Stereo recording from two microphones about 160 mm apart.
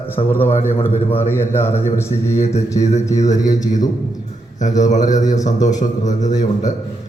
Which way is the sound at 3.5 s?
25° left (ahead or behind).